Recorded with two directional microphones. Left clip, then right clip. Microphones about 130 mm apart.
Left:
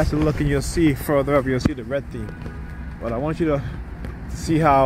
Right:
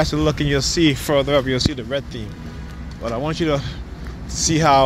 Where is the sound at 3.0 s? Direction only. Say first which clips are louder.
Right 1 dB; 80° left.